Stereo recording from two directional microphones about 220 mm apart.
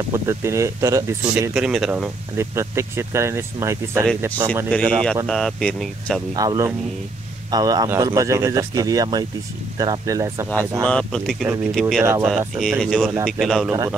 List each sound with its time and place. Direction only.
0.1 s speech: 10° right (ahead or behind)
5.3 s speech: centre (ahead or behind)
6.3 s speech: 15° right (ahead or behind)
10.8 s speech: 5° left (ahead or behind)
12.3 s speech: centre (ahead or behind)
13.7 s speech: 10° right (ahead or behind)